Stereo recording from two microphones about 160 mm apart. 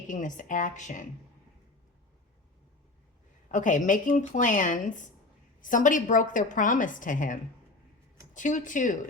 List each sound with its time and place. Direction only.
0.1 s a woman's voice: 50° left (ahead or behind)
3.5 s a woman's voice: 50° left (ahead or behind)